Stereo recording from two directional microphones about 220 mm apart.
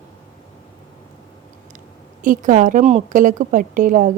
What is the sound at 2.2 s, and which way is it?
A woman's voice, 35° right (ahead or behind).